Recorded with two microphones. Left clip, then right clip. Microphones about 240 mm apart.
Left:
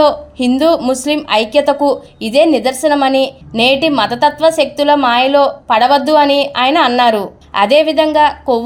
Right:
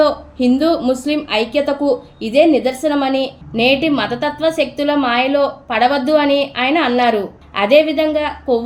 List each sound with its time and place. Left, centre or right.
0.0 s a woman's voice: left